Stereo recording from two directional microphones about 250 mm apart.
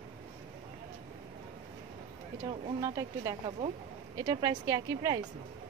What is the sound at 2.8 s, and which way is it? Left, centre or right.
Speech, centre.